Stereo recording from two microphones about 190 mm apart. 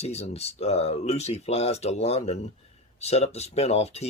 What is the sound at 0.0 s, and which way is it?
Speech, 35° left (ahead or behind).